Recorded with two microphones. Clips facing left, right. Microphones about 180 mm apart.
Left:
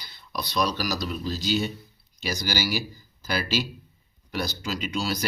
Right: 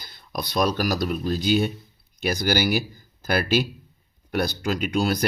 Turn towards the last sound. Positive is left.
turn(degrees=-55)  # may be behind; listen again after turning